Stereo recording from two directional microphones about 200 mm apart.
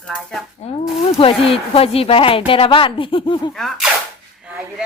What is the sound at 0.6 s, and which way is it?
Speech, 30° left (ahead or behind).